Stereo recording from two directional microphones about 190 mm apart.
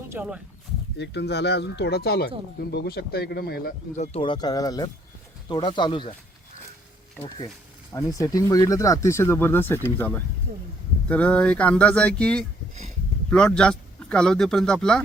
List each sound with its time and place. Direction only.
0.1 s speech: 5° right (ahead or behind)
0.9 s speech: 65° left (ahead or behind)
3.9 s speech: 35° left (ahead or behind)
7.2 s speech: 30° left (ahead or behind)
7.9 s speech: 15° left (ahead or behind)
10.5 s speech: 45° right (ahead or behind)
11.1 s speech: 5° left (ahead or behind)